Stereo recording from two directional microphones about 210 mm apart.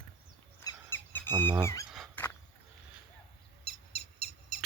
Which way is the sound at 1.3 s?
20° right (ahead or behind).